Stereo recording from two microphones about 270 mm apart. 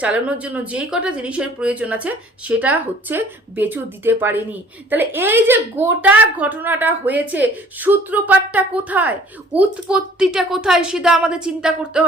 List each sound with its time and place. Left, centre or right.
0.0 s a woman's voice: centre